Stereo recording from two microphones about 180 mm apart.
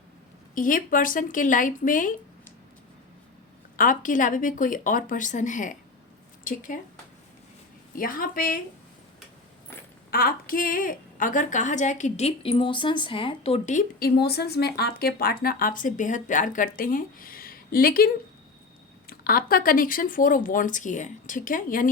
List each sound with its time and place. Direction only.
0.5 s speech: 50° left (ahead or behind)
3.8 s a woman's voice: 50° left (ahead or behind)
7.9 s speech: 50° left (ahead or behind)
10.1 s a woman's voice: 55° left (ahead or behind); by 13.8 s 40° left (ahead or behind)
14.0 s speech: 65° left (ahead or behind)